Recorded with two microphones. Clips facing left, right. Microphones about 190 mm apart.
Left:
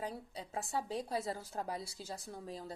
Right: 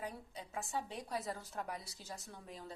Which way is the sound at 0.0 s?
35° left (ahead or behind).